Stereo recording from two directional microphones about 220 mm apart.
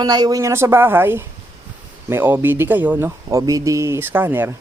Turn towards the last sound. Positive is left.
turn(degrees=-10)  # may be behind; listen again after turning